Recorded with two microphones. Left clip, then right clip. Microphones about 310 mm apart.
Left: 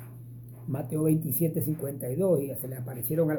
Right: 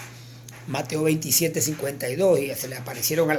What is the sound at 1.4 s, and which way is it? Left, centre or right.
Speech, right.